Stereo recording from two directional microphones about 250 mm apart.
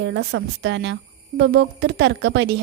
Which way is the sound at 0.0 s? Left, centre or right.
Right.